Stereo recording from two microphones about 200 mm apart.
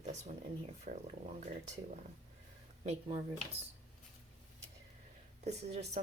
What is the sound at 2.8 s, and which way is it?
Speech, 30° right (ahead or behind).